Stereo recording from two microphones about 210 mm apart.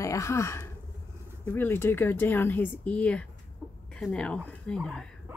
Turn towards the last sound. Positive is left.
turn(degrees=5)  # may be behind; listen again after turning